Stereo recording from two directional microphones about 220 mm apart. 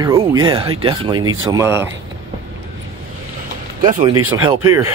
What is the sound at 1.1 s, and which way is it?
Speech, 70° right (ahead or behind).